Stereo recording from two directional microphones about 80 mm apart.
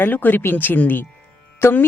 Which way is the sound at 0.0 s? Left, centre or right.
Left.